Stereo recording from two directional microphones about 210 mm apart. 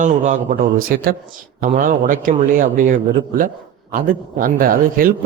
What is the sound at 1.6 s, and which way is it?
Speech, 40° right (ahead or behind).